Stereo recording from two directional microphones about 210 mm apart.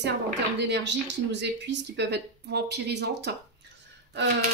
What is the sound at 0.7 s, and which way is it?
Speech, 55° right (ahead or behind).